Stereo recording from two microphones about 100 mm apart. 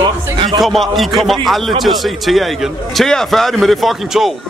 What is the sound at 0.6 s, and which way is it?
A man's voice, centre (ahead or behind).